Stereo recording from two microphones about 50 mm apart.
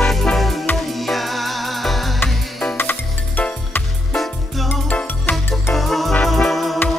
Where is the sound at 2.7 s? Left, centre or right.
Left.